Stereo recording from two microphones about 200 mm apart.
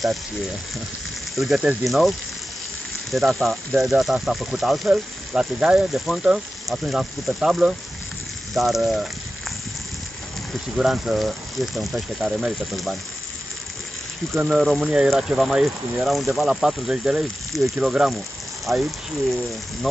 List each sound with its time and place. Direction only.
0.0 s speech: centre (ahead or behind)
10.8 s speech: centre (ahead or behind)
14.3 s speech: centre (ahead or behind)